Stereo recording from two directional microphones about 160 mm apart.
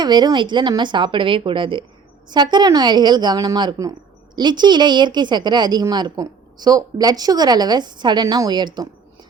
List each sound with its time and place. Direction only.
0.0 s a woman's voice: 25° right (ahead or behind)